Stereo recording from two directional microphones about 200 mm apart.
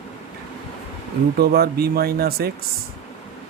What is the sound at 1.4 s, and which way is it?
Speech, 50° right (ahead or behind).